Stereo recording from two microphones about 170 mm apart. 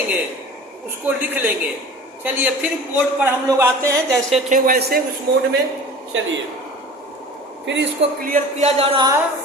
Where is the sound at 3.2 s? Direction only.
15° right (ahead or behind).